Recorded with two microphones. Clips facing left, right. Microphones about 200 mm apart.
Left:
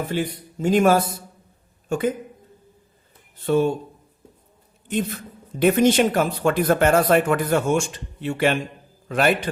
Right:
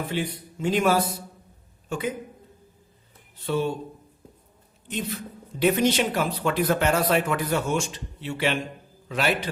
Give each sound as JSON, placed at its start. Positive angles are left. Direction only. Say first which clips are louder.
{"t": 0.1, "sound": "speech", "louder": "left 4 dB", "side_deg": 45}
{"t": 3.3, "sound": "speech", "louder": "left 6 dB", "side_deg": 50}
{"t": 4.9, "sound": "a man's voice", "louder": "left 6 dB", "side_deg": 50}